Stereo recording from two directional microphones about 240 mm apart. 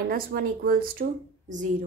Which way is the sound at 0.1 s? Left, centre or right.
Right.